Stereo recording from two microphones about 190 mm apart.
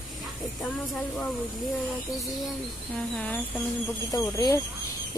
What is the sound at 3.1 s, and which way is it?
Speech, 5° left (ahead or behind).